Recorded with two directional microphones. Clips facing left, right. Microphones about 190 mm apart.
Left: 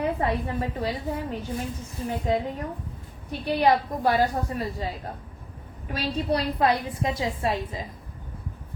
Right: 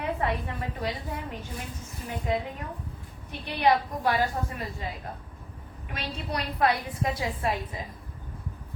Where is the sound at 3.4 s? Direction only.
35° left (ahead or behind).